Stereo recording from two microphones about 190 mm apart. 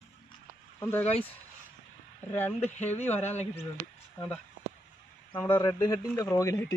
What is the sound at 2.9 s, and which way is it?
Speech, 35° left (ahead or behind).